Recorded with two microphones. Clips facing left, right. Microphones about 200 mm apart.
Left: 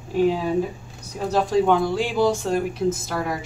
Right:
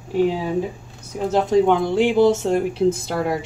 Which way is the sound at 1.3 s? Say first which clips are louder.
Right 2 dB; 20° right (ahead or behind).